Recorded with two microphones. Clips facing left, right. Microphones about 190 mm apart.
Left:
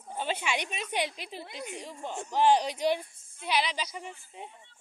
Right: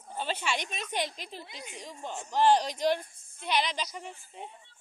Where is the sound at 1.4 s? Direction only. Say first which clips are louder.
Left 6 dB; 60° left (ahead or behind).